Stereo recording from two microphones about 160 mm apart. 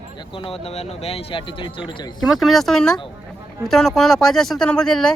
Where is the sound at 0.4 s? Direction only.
35° left (ahead or behind).